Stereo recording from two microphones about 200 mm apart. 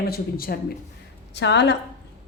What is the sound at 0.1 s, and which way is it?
Speech, 50° left (ahead or behind).